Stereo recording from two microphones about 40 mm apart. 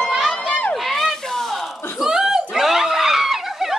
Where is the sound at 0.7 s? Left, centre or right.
Centre.